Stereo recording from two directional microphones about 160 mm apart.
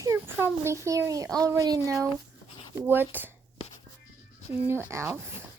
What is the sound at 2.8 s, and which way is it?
Speech, 10° right (ahead or behind).